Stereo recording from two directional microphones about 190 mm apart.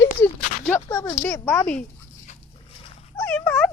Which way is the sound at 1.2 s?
10° left (ahead or behind).